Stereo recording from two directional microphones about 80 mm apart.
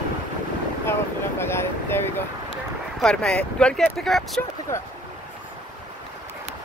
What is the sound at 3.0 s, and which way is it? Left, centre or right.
Speech, centre.